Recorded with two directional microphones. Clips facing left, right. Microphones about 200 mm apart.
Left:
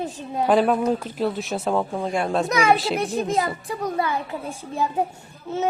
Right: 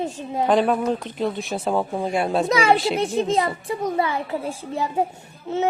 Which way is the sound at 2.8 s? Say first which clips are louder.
Right 2 dB; centre (ahead or behind).